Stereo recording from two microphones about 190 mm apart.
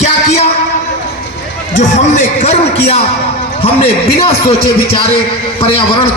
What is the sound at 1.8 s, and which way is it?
Speech, 40° left (ahead or behind).